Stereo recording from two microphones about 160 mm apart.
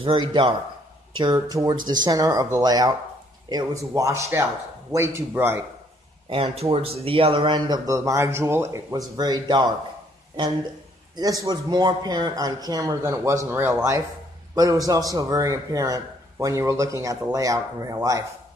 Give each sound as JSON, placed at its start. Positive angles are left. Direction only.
{"t": 0.0, "sound": "a man's voice", "side_deg": -30}
{"t": 6.2, "sound": "a man's voice", "side_deg": -35}
{"t": 11.1, "sound": "a man's voice", "side_deg": -25}